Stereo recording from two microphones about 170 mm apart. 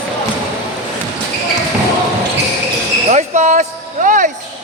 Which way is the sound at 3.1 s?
45° right (ahead or behind).